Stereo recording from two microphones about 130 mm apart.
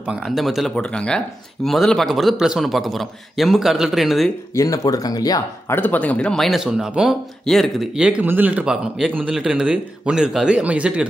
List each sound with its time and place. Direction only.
0.0 s speech: 5° right (ahead or behind)
4.6 s speech: 25° left (ahead or behind)
5.8 s a man's voice: 10° left (ahead or behind); by 11.1 s 10° right (ahead or behind)